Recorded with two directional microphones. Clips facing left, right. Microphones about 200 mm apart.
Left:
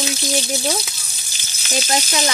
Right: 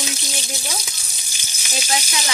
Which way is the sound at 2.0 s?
40° left (ahead or behind).